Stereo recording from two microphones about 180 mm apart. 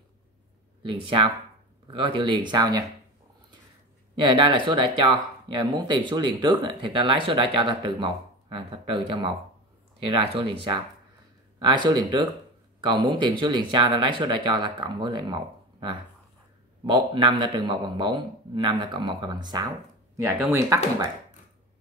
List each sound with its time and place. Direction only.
0.8 s speech: 25° right (ahead or behind)
4.1 s speech: 25° right (ahead or behind)